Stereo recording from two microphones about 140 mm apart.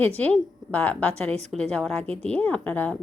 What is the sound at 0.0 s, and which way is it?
A woman's voice, 10° left (ahead or behind).